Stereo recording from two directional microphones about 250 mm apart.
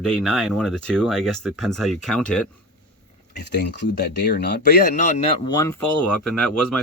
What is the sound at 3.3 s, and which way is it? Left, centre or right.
Speech, left.